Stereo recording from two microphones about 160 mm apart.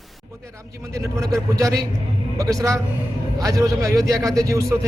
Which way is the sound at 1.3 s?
20° right (ahead or behind).